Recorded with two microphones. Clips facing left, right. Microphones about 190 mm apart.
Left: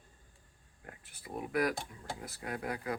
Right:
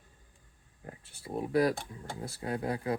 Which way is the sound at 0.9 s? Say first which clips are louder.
Right 5 dB; 25° right (ahead or behind).